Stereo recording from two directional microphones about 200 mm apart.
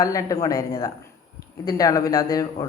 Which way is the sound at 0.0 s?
15° left (ahead or behind).